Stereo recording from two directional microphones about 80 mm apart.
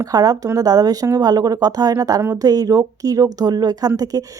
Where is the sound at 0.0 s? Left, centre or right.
Right.